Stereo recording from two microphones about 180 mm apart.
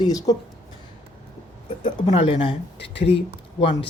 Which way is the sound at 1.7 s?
30° left (ahead or behind).